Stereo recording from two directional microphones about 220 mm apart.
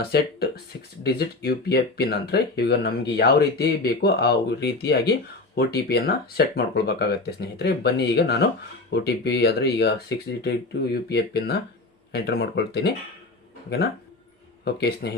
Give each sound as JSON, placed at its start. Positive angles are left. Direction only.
{"t": 0.0, "sound": "speech", "side_deg": 45}
{"t": 11.1, "sound": "speech", "side_deg": 45}